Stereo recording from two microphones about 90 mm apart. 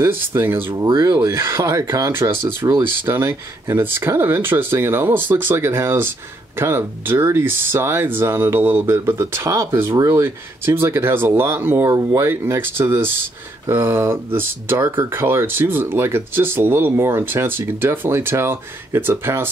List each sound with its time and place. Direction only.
0.0 s speech: 25° right (ahead or behind)
0.8 s speech: 50° right (ahead or behind)
1.2 s speech: 35° right (ahead or behind)